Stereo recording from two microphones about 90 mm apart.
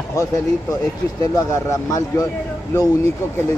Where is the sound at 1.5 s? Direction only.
40° left (ahead or behind).